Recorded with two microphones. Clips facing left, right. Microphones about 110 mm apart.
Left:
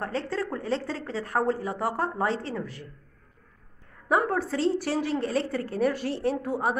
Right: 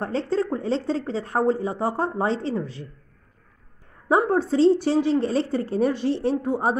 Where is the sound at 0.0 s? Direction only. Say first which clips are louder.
Right 6 dB; 25° right (ahead or behind).